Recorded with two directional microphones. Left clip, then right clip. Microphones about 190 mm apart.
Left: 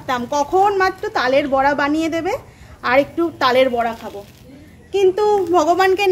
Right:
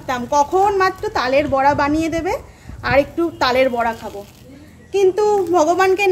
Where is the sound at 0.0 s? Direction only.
20° left (ahead or behind).